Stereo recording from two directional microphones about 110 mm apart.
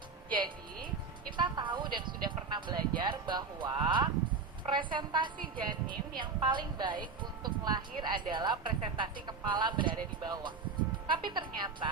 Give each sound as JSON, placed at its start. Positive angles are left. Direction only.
{"t": 0.3, "sound": "music", "side_deg": -45}
{"t": 1.4, "sound": "a sound", "side_deg": -45}
{"t": 5.9, "sound": "a woman's voice", "side_deg": -45}